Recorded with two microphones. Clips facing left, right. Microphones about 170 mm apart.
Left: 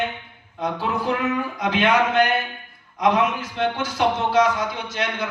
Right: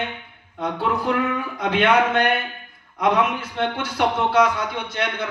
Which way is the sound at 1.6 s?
60° right (ahead or behind).